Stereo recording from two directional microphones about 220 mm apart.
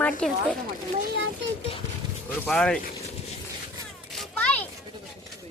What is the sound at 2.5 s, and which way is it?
Speech, 5° left (ahead or behind).